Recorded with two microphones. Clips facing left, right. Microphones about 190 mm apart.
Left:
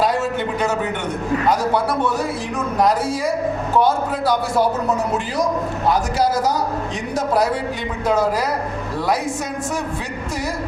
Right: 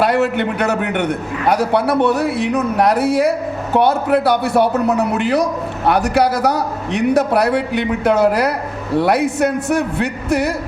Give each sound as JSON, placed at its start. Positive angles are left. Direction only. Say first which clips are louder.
{"t": 0.0, "sound": "a man's voice", "louder": "right 4 dB", "side_deg": -65}